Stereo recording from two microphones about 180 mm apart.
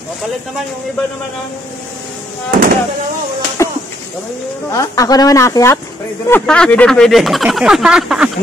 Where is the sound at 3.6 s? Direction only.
15° left (ahead or behind).